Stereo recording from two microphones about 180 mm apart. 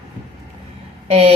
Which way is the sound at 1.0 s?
30° right (ahead or behind).